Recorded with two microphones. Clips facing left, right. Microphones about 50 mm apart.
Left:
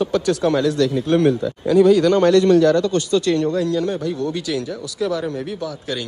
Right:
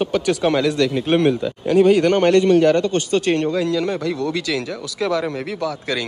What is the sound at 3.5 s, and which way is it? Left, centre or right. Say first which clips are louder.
Speech: even; right.